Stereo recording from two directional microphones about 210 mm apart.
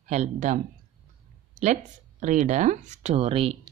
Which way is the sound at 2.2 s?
35° right (ahead or behind).